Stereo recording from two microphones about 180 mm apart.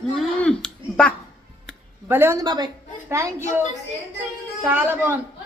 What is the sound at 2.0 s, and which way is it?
Speech, 10° right (ahead or behind).